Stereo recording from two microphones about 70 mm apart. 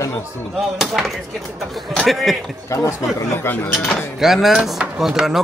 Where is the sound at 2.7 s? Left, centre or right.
Left.